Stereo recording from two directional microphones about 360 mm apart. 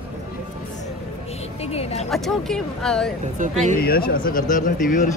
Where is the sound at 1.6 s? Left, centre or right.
Centre.